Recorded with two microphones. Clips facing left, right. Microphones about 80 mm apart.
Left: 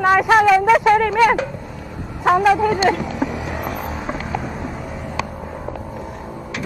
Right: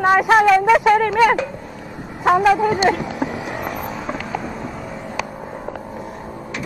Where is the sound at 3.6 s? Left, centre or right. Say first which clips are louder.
Even; centre.